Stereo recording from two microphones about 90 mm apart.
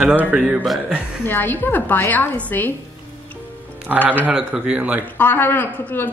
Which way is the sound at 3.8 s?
20° right (ahead or behind).